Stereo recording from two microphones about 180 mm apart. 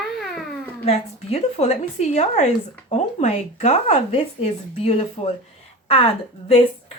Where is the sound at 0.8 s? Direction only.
35° left (ahead or behind).